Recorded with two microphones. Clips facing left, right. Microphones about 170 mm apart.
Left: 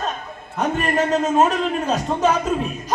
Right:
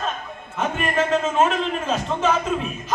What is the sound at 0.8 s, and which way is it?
Speech, 40° left (ahead or behind).